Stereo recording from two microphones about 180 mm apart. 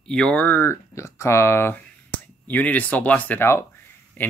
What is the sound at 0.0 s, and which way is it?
Speech, 5° left (ahead or behind).